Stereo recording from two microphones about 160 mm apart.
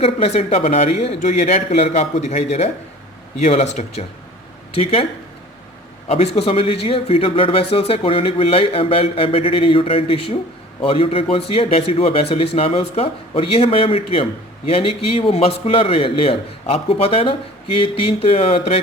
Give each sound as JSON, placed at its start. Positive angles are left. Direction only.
{"t": 0.0, "sound": "a man's voice", "side_deg": 40}
{"t": 6.1, "sound": "speech", "side_deg": 40}